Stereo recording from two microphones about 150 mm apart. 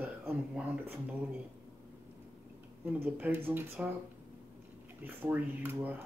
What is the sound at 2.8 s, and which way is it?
Speech, 15° right (ahead or behind).